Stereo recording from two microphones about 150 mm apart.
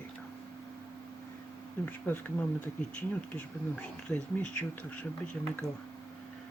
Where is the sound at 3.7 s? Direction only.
5° left (ahead or behind).